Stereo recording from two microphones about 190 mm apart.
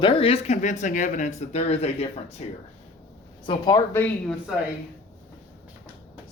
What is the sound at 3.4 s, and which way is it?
Speech, 25° left (ahead or behind).